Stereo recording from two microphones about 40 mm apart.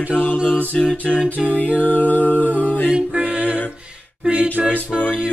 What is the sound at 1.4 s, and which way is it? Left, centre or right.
Music, centre.